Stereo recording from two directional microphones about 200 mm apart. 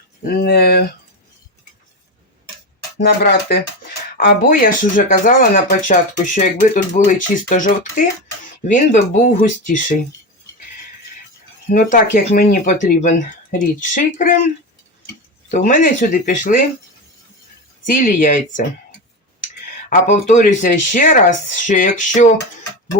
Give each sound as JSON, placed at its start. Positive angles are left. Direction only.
{"t": 0.3, "sound": "speech", "side_deg": 50}
{"t": 3.0, "sound": "speech", "side_deg": 50}
{"t": 11.7, "sound": "speech", "side_deg": 40}
{"t": 15.4, "sound": "speech", "side_deg": 40}
{"t": 18.0, "sound": "speech", "side_deg": 40}
{"t": 19.9, "sound": "speech", "side_deg": 40}